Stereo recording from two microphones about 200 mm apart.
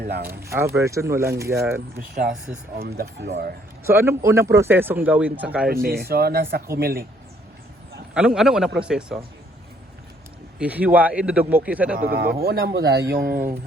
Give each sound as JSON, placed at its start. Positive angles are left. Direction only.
{"t": 0.0, "sound": "a man's voice", "side_deg": -50}
{"t": 0.5, "sound": "speech", "side_deg": -15}
{"t": 2.0, "sound": "speech", "side_deg": -40}
{"t": 2.8, "sound": "a man's voice", "side_deg": -55}
{"t": 3.8, "sound": "speech", "side_deg": -10}
{"t": 5.6, "sound": "a man's voice", "side_deg": -50}
{"t": 8.1, "sound": "speech", "side_deg": -5}
{"t": 10.6, "sound": "speech", "side_deg": -5}
{"t": 11.9, "sound": "a man's voice", "side_deg": -50}